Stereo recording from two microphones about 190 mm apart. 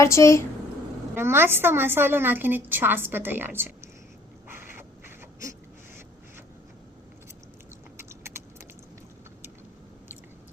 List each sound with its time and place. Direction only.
0.0 s a woman's voice: 15° left (ahead or behind)
1.1 s a woman's voice: 10° right (ahead or behind)
4.4 s a sound: 10° right (ahead or behind)
7.9 s biting: 15° right (ahead or behind)